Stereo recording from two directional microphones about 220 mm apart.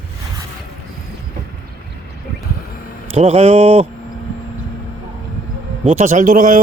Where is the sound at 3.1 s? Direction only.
30° right (ahead or behind).